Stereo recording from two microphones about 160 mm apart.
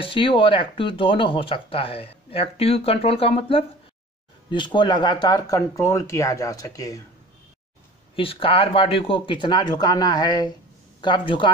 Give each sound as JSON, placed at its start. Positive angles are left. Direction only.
{"t": 0.0, "sound": "speech", "side_deg": 35}
{"t": 8.2, "sound": "speech", "side_deg": 35}